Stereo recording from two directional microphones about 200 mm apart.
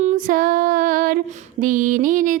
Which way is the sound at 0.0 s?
40° right (ahead or behind).